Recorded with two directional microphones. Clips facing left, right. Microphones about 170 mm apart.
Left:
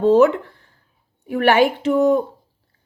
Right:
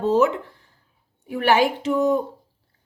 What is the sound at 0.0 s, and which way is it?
A woman's voice, 60° left (ahead or behind).